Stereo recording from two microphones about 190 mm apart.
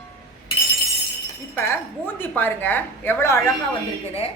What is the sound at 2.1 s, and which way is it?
A woman's voice, 10° left (ahead or behind).